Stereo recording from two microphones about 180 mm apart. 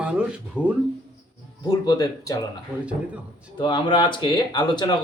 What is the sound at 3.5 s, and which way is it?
Speech, 25° left (ahead or behind).